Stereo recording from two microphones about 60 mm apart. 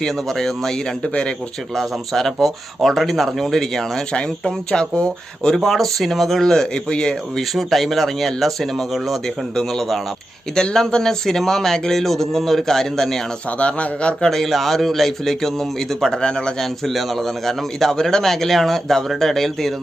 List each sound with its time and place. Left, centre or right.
0.0 s speech: centre
1.0 s speech: centre
1.7 s a man's voice: centre
5.5 s a man's voice: centre
7.5 s a man's voice: centre
13.6 s a man's voice: left
14.3 s a man's voice: centre